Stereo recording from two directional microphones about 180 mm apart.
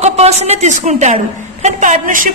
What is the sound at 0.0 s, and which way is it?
A woman's voice, 35° right (ahead or behind).